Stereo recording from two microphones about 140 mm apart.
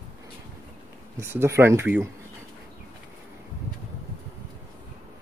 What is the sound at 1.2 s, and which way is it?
Speech, 20° right (ahead or behind).